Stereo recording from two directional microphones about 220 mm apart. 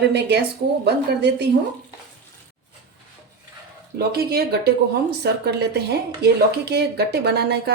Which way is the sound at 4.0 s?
45° right (ahead or behind).